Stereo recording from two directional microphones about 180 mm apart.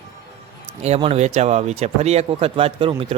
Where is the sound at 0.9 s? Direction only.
35° right (ahead or behind).